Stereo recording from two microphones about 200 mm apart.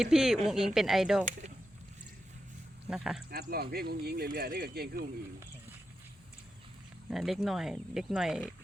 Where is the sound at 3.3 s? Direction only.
50° right (ahead or behind).